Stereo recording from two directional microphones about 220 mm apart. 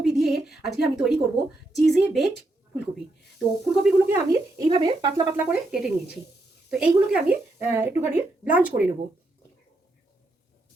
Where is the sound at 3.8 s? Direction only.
10° right (ahead or behind).